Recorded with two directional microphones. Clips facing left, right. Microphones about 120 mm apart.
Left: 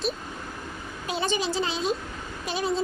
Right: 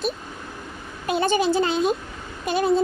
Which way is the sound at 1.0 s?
55° right (ahead or behind).